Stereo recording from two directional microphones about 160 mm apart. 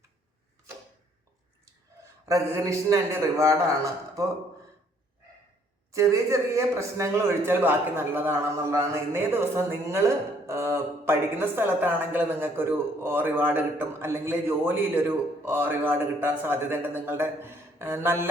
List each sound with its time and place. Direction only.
2.2 s a man's voice: 20° right (ahead or behind)
5.9 s speech: 20° right (ahead or behind)